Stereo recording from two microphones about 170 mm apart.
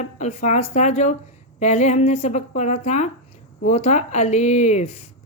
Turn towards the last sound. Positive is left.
turn(degrees=40)  # may be behind; listen again after turning